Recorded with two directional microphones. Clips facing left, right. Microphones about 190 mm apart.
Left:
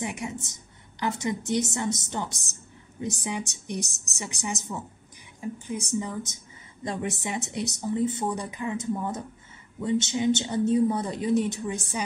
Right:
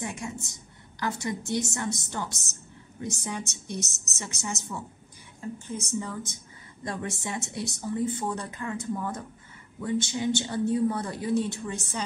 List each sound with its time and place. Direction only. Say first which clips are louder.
0.0 s a woman's voice: left 2 dB; 15° left (ahead or behind)